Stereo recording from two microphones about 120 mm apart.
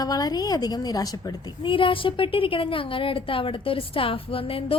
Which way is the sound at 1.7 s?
45° left (ahead or behind).